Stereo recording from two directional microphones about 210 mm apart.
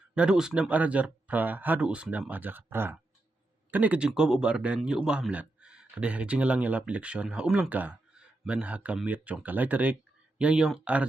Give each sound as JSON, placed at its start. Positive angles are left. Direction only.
{"t": 0.2, "sound": "a man's voice", "side_deg": -5}